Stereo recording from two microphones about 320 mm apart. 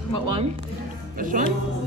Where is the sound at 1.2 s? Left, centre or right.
Right.